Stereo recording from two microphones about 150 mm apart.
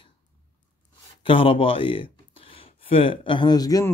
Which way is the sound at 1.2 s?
35° left (ahead or behind).